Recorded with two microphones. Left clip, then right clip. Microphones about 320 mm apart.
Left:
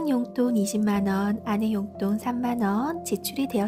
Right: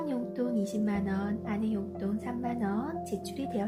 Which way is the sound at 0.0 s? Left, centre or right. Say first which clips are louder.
Left 7 dB; left.